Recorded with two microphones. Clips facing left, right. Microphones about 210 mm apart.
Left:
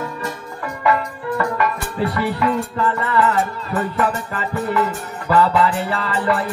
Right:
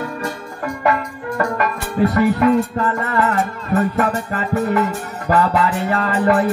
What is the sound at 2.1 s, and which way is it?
Music, 45° right (ahead or behind).